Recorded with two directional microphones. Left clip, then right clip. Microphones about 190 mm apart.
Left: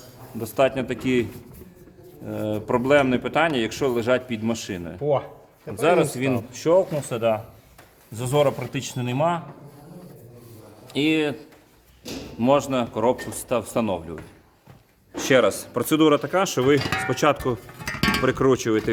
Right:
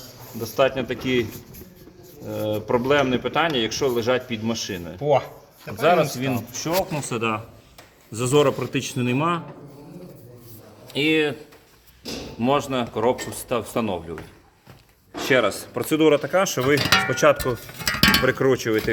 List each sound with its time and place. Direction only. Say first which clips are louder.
0.4 s speech: even; 15° left (ahead or behind)
5.0 s speech: right 3 dB; 5° right (ahead or behind)
5.6 s speech: right 1 dB; 20° left (ahead or behind)
10.8 s speech: right 2 dB; 15° left (ahead or behind)
12.4 s speech: left 2 dB; 15° left (ahead or behind)
15.1 s speech: left 1 dB; 30° left (ahead or behind)